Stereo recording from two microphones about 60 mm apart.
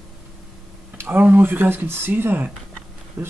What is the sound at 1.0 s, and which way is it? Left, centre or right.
Speech, right.